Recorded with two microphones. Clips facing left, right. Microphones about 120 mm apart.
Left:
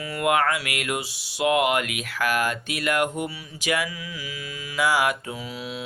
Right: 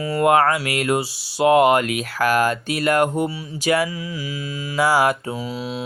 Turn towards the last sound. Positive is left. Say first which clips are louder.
# right 5 dB
turn(degrees=-35)  # may be behind; listen again after turning